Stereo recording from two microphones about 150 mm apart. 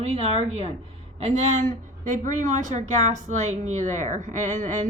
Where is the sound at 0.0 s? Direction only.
40° right (ahead or behind).